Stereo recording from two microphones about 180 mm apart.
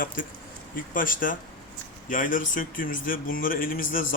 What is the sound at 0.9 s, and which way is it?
A man's voice, 50° left (ahead or behind).